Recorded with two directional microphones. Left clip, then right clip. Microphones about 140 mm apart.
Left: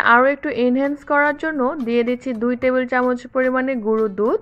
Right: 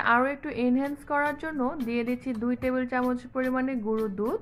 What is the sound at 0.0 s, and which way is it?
Speech, 30° left (ahead or behind).